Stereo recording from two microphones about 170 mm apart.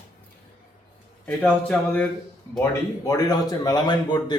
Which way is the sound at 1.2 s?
10° left (ahead or behind).